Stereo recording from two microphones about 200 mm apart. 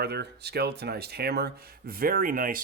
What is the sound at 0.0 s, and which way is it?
Speech, 55° right (ahead or behind).